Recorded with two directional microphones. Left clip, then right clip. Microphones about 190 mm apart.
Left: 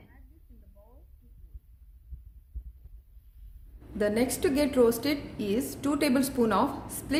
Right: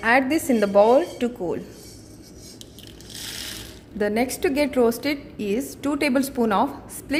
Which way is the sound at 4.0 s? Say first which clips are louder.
Right 4 dB; 45° right (ahead or behind).